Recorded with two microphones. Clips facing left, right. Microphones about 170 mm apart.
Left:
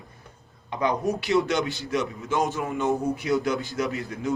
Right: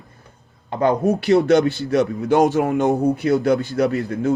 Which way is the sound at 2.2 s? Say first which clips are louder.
Right 10 dB; 70° right (ahead or behind).